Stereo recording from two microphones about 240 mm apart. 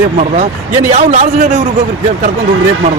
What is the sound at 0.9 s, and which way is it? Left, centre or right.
Speech, right.